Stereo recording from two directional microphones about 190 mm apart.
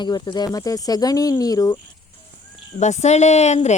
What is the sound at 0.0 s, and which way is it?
Speech, 20° left (ahead or behind).